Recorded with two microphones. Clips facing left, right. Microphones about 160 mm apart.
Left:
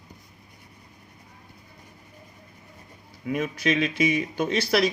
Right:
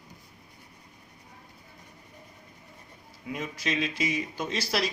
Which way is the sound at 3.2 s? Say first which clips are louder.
Left 7 dB; 60° left (ahead or behind).